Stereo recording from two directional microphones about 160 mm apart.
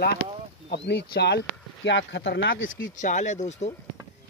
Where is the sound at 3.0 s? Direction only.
50° left (ahead or behind).